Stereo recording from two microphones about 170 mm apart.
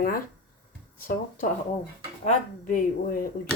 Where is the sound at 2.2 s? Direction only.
45° left (ahead or behind).